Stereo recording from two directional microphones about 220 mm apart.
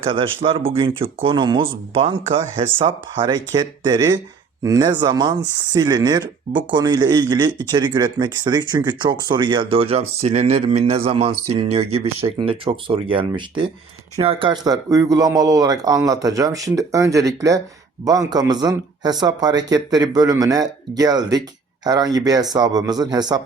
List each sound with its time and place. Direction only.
0.0 s speech: 25° right (ahead or behind)